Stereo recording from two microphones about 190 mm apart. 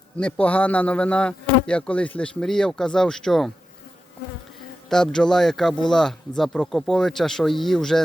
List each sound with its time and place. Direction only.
0.2 s speech: 5° left (ahead or behind)
4.9 s speech: 5° left (ahead or behind)